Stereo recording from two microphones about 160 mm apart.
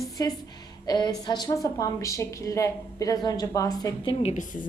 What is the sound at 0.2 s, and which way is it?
A woman's voice, 20° left (ahead or behind).